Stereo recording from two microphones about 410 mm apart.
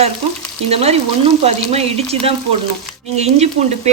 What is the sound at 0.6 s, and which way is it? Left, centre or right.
Stir, centre.